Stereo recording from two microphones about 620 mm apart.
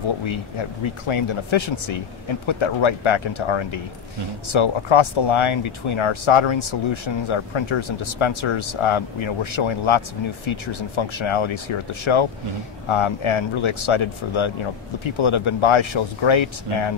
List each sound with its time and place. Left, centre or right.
0.2 s speech: left